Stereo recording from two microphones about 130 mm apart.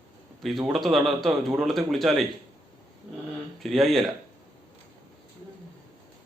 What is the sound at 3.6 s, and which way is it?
Speech, centre (ahead or behind).